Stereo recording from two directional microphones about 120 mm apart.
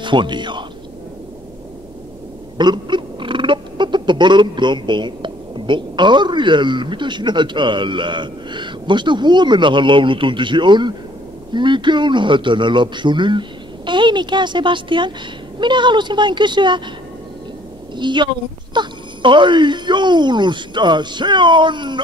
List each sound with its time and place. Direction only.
0.0 s speech: 40° right (ahead or behind)
2.5 s a sound: 40° right (ahead or behind)
11.5 s speech: 40° right (ahead or behind)
17.9 s speech: 40° right (ahead or behind)